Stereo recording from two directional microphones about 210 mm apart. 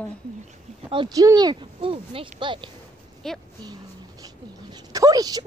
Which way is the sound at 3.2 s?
Centre (ahead or behind).